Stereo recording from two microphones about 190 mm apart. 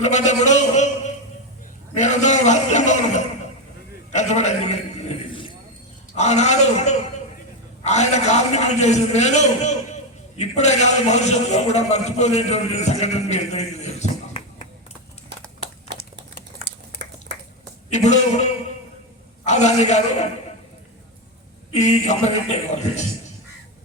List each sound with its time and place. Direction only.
0.0 s a man's voice: 40° left (ahead or behind)
4.1 s a sound: 40° left (ahead or behind)
6.1 s a man's voice: 35° left (ahead or behind)
15.9 s typewriter: 65° right (ahead or behind)
17.9 s a man's voice: 40° left (ahead or behind)
19.5 s a man's voice: 35° left (ahead or behind)
21.8 s a man's voice: 35° left (ahead or behind)